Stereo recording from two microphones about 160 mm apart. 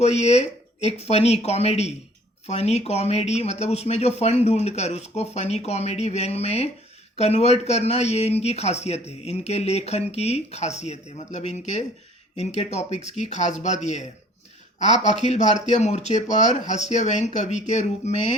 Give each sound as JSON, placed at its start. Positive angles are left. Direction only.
{"t": 0.0, "sound": "speech", "side_deg": 45}